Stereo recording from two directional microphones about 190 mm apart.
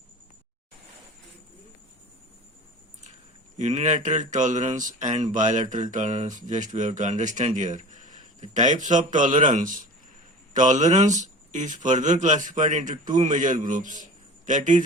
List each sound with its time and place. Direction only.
3.6 s a man's voice: 35° right (ahead or behind)